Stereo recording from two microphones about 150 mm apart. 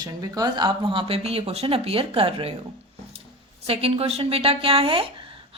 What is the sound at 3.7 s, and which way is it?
Speech, 40° right (ahead or behind).